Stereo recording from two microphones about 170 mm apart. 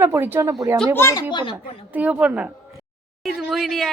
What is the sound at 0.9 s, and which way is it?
Speech, 15° left (ahead or behind).